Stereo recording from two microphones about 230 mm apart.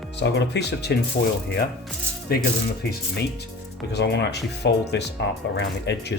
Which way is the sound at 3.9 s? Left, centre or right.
Left.